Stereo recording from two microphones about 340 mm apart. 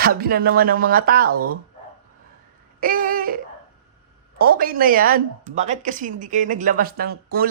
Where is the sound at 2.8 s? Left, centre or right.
Right.